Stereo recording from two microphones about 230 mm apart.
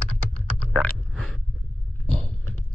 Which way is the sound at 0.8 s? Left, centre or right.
Centre.